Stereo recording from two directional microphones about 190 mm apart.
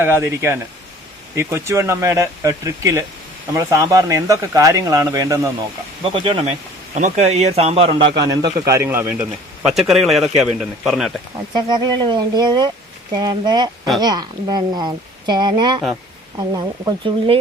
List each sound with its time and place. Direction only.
0.0 s speech: 15° right (ahead or behind)
6.0 s a man's voice: 30° right (ahead or behind); by 11.2 s centre (ahead or behind)
11.5 s speech: 20° right (ahead or behind)